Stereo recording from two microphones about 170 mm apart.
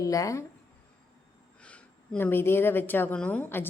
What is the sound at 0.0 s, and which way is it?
Speech, 20° left (ahead or behind).